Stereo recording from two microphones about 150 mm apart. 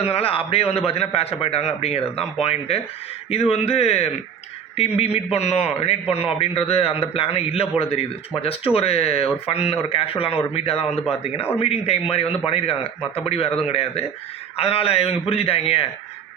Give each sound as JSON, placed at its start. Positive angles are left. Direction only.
{"t": 0.0, "sound": "a man's voice", "side_deg": 40}
{"t": 5.1, "sound": "a man's voice", "side_deg": 45}